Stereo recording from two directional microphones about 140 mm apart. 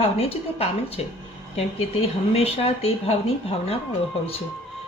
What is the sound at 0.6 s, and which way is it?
Speech, 45° left (ahead or behind).